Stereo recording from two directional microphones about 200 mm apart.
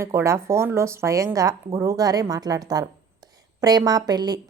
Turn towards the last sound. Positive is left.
turn(degrees=-20)  # may be behind; listen again after turning